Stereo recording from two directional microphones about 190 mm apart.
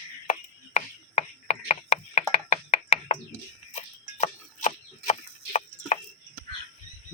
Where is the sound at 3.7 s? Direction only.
35° left (ahead or behind).